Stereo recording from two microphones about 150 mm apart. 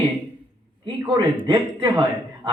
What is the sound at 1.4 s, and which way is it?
Speech, 30° right (ahead or behind).